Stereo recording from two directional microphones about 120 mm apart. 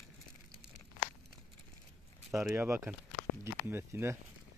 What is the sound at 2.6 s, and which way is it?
Speech, 20° right (ahead or behind).